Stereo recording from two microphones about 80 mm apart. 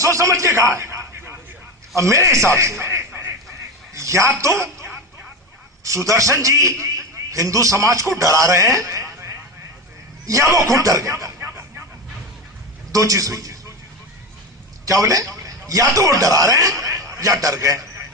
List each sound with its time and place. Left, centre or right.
0.0 s a man's voice: right
12.9 s a man's voice: right
14.8 s a man's voice: right